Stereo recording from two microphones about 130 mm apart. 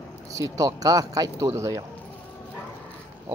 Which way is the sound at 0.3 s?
25° right (ahead or behind).